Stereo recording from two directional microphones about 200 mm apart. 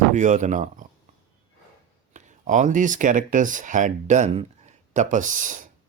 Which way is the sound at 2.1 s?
40° right (ahead or behind).